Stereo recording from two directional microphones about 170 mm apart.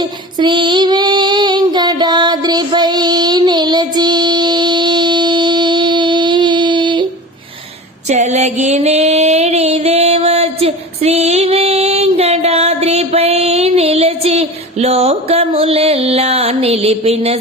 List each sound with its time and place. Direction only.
0.0 s female singing: 25° right (ahead or behind)
8.0 s music: 45° right (ahead or behind)